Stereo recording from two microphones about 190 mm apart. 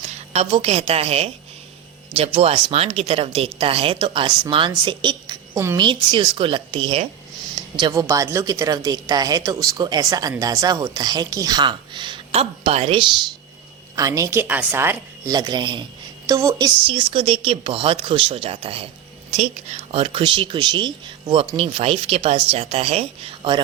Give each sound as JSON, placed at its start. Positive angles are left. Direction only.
{"t": 0.1, "sound": "a woman's voice", "side_deg": -35}
{"t": 13.9, "sound": "speech", "side_deg": -15}